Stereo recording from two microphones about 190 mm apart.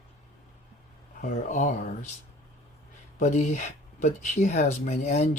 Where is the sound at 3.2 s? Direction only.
40° left (ahead or behind).